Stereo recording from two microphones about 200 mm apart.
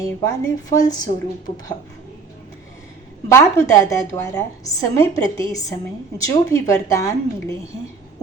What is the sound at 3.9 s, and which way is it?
A woman's voice, 15° left (ahead or behind).